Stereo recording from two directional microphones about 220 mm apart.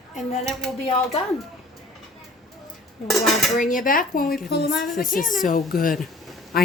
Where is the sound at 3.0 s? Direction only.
Centre (ahead or behind).